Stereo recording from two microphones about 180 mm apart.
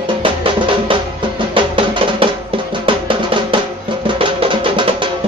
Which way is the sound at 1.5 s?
30° right (ahead or behind).